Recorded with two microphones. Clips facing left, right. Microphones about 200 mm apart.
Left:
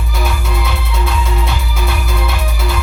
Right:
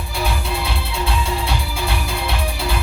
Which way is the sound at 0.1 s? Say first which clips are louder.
Left 2 dB; 30° right (ahead or behind).